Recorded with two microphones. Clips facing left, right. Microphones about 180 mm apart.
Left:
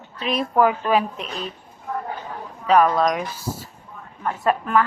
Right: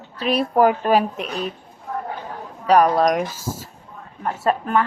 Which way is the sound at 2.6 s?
35° right (ahead or behind).